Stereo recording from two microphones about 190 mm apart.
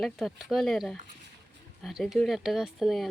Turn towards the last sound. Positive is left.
turn(degrees=0)  # may be behind; listen again after turning